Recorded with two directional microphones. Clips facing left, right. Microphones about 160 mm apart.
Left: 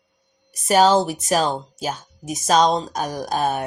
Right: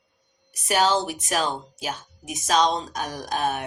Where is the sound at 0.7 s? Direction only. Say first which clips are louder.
Left 6 dB; 40° left (ahead or behind).